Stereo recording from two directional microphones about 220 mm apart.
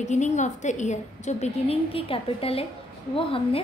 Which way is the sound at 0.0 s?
30° left (ahead or behind).